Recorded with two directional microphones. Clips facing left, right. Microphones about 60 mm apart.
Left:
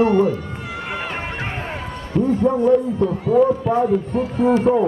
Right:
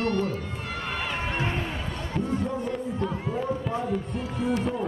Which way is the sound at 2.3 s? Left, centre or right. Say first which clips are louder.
Left 12 dB; left.